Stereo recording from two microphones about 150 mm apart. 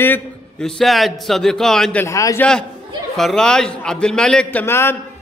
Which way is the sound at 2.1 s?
20° left (ahead or behind).